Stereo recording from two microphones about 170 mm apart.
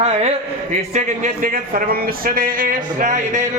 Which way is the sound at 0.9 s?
50° right (ahead or behind).